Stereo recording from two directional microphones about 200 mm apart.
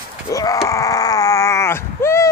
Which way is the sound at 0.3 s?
15° left (ahead or behind).